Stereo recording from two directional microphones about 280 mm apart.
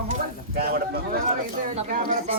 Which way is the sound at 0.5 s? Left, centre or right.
Right.